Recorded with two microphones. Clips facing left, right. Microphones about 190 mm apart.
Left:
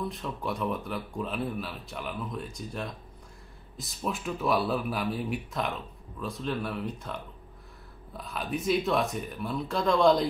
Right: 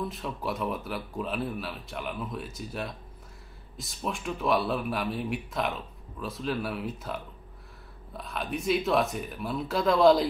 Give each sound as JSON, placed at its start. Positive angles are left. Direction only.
{"t": 0.0, "sound": "speech", "side_deg": 0}
{"t": 8.2, "sound": "speech", "side_deg": 0}